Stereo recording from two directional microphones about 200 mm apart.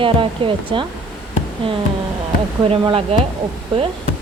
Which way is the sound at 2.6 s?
25° right (ahead or behind).